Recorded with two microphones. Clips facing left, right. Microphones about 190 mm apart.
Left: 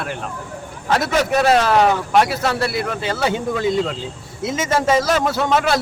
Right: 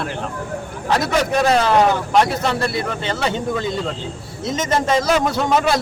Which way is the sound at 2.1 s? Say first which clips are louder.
Even; 5° left (ahead or behind).